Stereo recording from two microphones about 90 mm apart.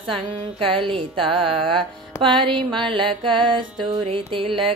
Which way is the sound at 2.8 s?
70° right (ahead or behind).